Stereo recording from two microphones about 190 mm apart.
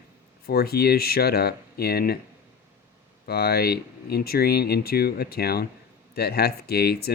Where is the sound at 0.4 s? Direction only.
55° left (ahead or behind).